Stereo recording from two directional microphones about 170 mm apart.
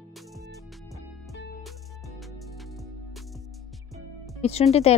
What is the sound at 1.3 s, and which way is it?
Music, 70° left (ahead or behind).